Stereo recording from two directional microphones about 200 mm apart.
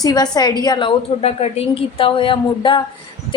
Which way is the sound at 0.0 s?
20° left (ahead or behind).